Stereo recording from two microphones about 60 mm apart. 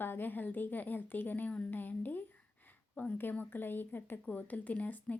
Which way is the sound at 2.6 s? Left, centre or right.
Left.